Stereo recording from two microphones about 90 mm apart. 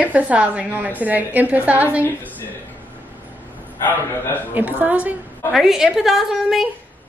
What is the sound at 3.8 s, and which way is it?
Speech, 20° left (ahead or behind).